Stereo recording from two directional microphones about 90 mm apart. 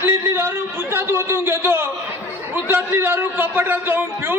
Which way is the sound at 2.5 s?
20° right (ahead or behind).